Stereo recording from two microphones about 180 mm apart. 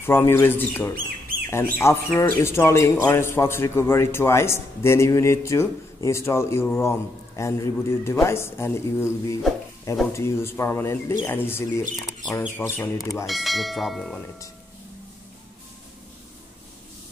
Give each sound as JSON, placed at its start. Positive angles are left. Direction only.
{"t": 0.0, "sound": "speech", "side_deg": 15}
{"t": 13.3, "sound": "speech", "side_deg": 0}